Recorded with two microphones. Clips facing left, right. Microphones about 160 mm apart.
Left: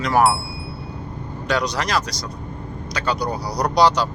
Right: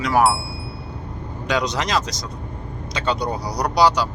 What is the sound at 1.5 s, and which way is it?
Speech, 20° right (ahead or behind).